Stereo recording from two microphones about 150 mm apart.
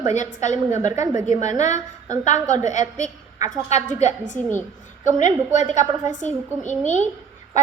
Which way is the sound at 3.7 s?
50° left (ahead or behind).